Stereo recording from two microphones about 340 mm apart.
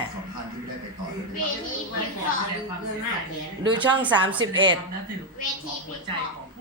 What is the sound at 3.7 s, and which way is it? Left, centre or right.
A woman's voice, centre.